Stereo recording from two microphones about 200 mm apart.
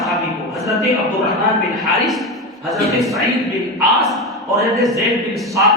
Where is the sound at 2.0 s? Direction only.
Centre (ahead or behind).